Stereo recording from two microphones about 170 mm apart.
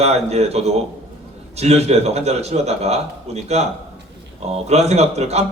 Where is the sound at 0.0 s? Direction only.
40° right (ahead or behind).